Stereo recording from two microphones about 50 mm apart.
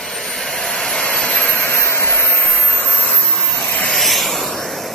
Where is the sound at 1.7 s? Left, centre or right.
Left.